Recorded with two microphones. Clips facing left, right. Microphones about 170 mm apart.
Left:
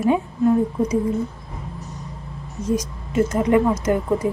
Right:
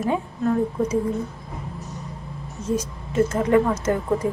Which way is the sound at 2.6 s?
10° left (ahead or behind).